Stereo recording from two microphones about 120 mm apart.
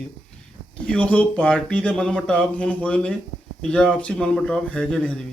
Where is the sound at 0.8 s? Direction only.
10° left (ahead or behind).